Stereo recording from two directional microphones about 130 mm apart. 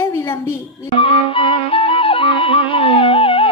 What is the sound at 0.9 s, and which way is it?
Music, 45° left (ahead or behind).